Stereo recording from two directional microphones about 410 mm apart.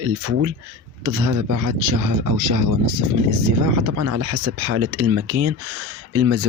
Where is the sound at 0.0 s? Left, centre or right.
Right.